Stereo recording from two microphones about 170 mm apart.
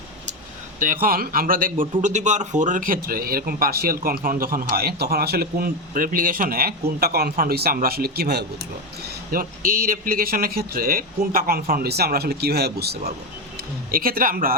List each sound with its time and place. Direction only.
0.8 s speech: 55° right (ahead or behind)
9.0 s speech: 55° right (ahead or behind)
13.9 s speech: 60° right (ahead or behind)